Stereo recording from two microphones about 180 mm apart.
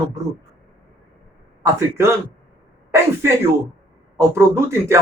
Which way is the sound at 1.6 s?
15° right (ahead or behind).